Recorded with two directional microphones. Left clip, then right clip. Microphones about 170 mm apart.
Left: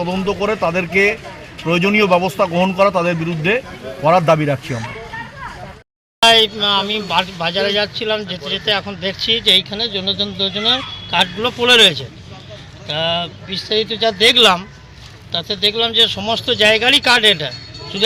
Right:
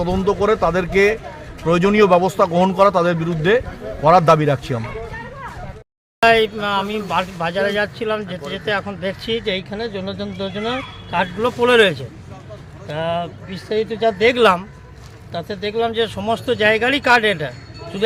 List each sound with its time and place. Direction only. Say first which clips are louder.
0.0 s a man's voice: right 1 dB; 25° right (ahead or behind)
6.2 s speech: left 3 dB; 10° right (ahead or behind)
12.9 s speech: left 3 dB; centre (ahead or behind)